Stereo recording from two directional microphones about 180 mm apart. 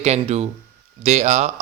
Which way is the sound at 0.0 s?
35° right (ahead or behind).